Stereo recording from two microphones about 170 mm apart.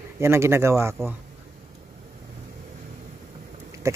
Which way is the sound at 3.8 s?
20° right (ahead or behind).